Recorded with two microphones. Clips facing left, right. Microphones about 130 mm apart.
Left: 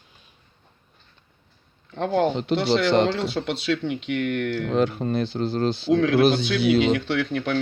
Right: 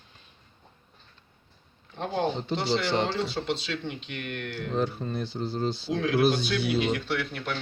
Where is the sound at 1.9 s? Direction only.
90° left.